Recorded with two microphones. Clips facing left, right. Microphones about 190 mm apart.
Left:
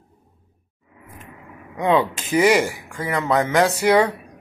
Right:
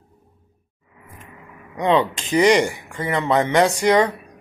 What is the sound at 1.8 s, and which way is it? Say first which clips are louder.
Speech: even; 10° left (ahead or behind).